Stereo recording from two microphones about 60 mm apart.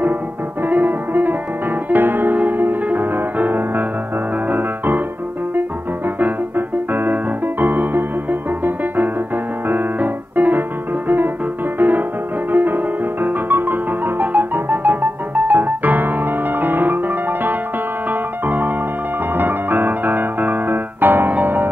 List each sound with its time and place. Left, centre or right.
0.7 s music: right
6.1 s music: right
9.7 s piano: right
12.5 s music: right
16.5 s piano: right
19.3 s music: right